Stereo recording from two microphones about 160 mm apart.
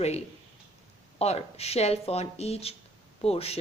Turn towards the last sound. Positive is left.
turn(degrees=40)  # may be behind; listen again after turning